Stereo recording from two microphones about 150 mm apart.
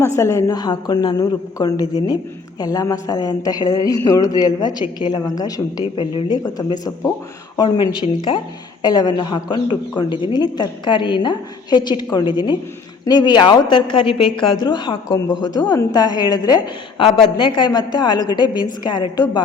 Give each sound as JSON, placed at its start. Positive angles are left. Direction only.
{"t": 0.0, "sound": "a woman's voice", "side_deg": 20}